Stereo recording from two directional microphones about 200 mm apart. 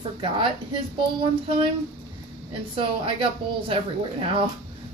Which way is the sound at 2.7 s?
25° right (ahead or behind).